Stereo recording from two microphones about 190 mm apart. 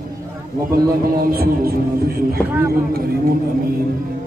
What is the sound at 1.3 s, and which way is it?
Speech, 55° right (ahead or behind).